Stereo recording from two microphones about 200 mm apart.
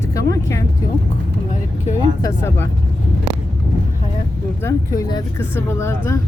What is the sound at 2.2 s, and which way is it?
Speech, 15° left (ahead or behind).